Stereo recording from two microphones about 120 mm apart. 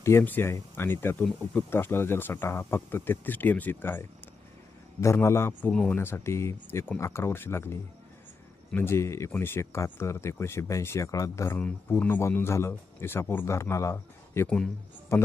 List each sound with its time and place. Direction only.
0.0 s speech: 20° left (ahead or behind)
14.4 s speech: 5° left (ahead or behind)
15.1 s speech: 25° left (ahead or behind)